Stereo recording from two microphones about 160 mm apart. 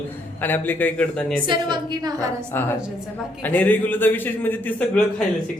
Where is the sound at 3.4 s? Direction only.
10° left (ahead or behind).